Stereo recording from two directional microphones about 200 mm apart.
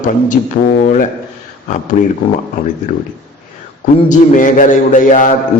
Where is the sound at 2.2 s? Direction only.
25° left (ahead or behind).